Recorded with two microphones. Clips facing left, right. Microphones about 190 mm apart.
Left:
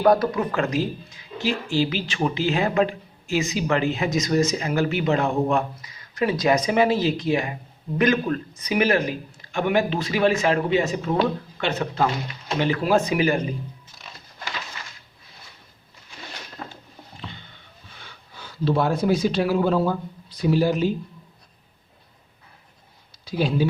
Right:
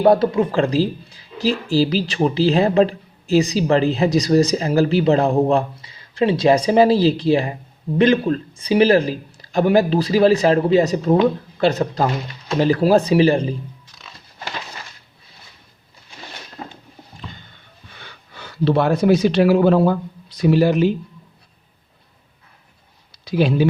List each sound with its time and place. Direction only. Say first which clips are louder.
0.0 s speech: right 4 dB; 25° right (ahead or behind)
16.6 s a sound: right 3 dB; 20° right (ahead or behind)
17.9 s speech: right 4 dB; 70° right (ahead or behind)
23.2 s speech: right 5 dB; 70° right (ahead or behind)